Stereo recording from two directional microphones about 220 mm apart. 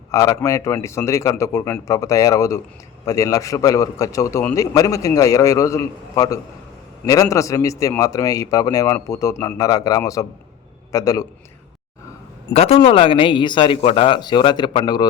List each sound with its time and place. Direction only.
0.1 s a man's voice: 15° left (ahead or behind)
12.5 s speech: 25° left (ahead or behind)